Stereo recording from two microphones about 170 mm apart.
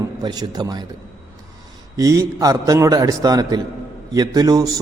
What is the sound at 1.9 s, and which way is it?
A man's voice, 20° right (ahead or behind).